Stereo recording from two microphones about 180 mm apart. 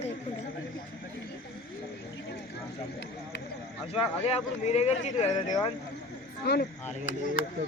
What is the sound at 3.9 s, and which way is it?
Speech, 35° left (ahead or behind).